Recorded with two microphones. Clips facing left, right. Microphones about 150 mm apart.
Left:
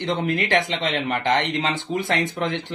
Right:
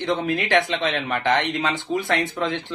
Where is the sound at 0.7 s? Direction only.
20° left (ahead or behind).